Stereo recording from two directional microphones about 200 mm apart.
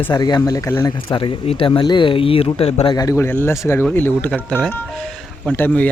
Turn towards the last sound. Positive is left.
turn(degrees=10)  # may be behind; listen again after turning